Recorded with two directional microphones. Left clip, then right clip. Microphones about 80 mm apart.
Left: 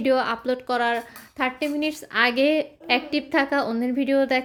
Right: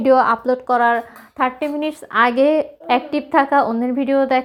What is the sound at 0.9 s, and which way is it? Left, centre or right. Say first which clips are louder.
Speech: right 7 dB; left.